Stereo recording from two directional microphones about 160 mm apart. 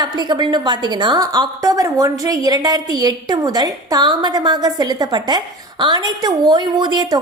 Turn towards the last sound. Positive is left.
turn(degrees=-25)  # may be behind; listen again after turning